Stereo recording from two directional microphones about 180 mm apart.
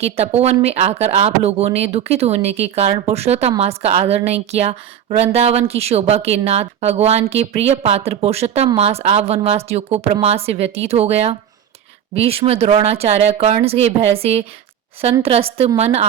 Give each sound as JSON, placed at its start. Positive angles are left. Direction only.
{"t": 0.0, "sound": "a woman's voice", "side_deg": -35}